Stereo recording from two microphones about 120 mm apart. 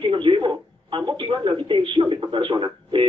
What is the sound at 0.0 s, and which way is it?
Speech, 45° right (ahead or behind).